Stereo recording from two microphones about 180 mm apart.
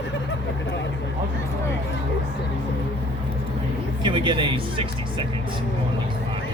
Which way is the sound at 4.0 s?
25° right (ahead or behind).